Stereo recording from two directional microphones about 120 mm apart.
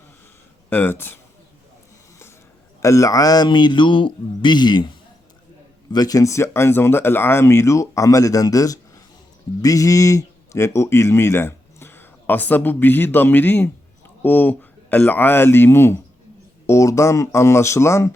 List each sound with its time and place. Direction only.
0.7 s speech: 20° left (ahead or behind)
2.8 s speech: 25° left (ahead or behind)
5.9 s speech: 30° left (ahead or behind)